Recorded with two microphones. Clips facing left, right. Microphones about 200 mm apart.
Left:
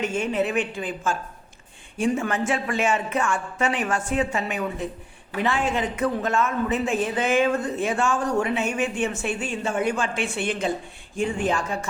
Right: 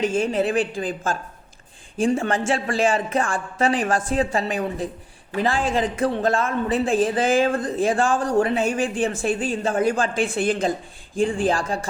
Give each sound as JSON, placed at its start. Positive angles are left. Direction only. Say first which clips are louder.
{"t": 0.0, "sound": "speech", "louder": "right 3 dB", "side_deg": -30}